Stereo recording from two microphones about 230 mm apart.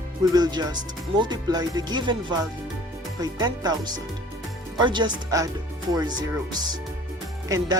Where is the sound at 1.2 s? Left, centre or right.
Centre.